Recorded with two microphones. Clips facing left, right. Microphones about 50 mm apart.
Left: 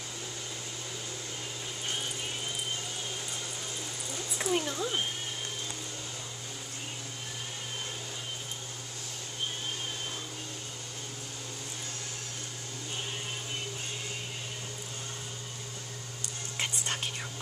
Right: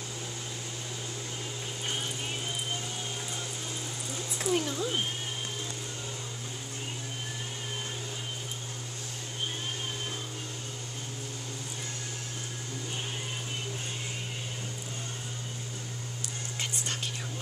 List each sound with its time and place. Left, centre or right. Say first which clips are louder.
4.4 s speech: right 1 dB; centre
16.5 s whispering: left 2 dB; centre